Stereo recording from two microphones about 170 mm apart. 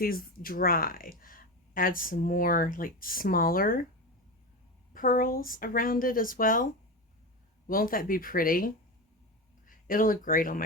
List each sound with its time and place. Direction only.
0.0 s speech: 60° left (ahead or behind)
4.9 s speech: 55° left (ahead or behind)
7.7 s speech: 55° left (ahead or behind)